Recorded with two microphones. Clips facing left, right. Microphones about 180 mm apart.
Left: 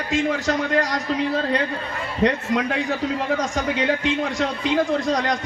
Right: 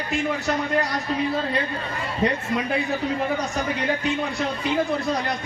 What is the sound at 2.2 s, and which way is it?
Speech, 90° left.